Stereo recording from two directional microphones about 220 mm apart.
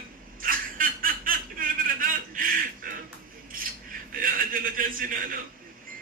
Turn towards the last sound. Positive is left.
turn(degrees=-40)  # may be behind; listen again after turning